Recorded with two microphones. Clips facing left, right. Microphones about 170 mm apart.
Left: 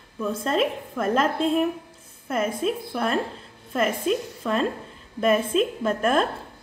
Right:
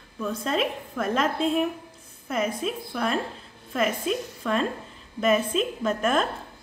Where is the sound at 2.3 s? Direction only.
50° left (ahead or behind).